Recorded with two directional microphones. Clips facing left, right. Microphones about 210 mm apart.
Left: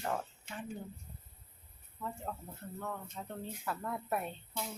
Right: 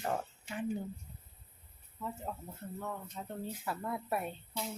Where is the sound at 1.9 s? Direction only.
5° right (ahead or behind).